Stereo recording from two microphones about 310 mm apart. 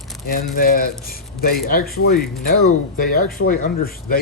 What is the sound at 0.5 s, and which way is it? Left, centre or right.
Speech, left.